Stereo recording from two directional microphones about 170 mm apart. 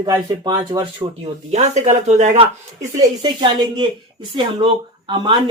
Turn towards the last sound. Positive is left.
turn(degrees=-25)  # may be behind; listen again after turning